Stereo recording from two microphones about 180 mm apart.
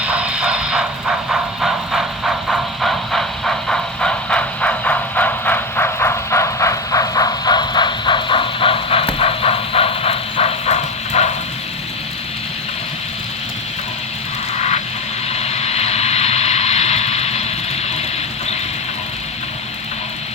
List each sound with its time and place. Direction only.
0.0 s vehicle: 5° right (ahead or behind); by 11.3 s 40° left (ahead or behind)
15.3 s vehicle: 35° left (ahead or behind)